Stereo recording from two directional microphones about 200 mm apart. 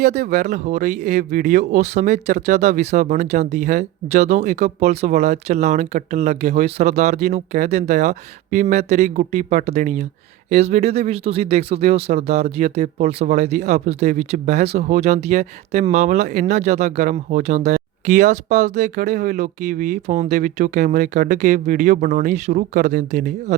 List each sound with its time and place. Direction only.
0.0 s speech: 35° right (ahead or behind)